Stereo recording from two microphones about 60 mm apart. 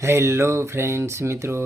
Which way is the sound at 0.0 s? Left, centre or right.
Right.